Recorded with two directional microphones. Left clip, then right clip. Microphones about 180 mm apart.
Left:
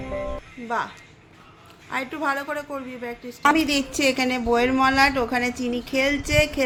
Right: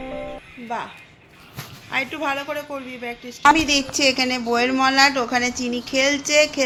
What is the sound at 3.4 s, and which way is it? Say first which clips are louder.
A woman's voice: right 4 dB; 15° left (ahead or behind).